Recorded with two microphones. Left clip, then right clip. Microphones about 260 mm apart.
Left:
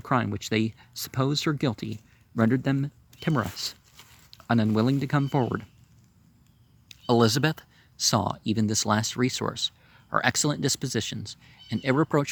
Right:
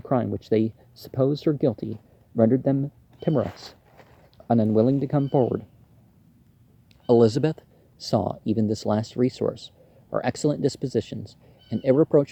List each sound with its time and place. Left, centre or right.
0.1 s speech: left
4.3 s a sound: left
4.8 s speech: left
6.8 s speech: left